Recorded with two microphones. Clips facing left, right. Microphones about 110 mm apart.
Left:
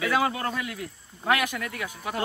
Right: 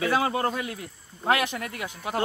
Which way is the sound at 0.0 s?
35° right (ahead or behind).